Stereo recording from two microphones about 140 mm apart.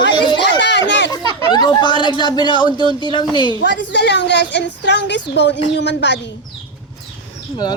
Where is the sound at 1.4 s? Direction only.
30° left (ahead or behind).